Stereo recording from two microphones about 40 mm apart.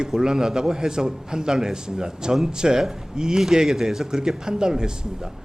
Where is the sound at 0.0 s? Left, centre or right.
Centre.